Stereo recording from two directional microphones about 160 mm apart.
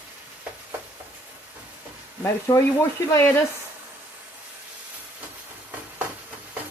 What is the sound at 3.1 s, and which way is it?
Frying, 15° left (ahead or behind).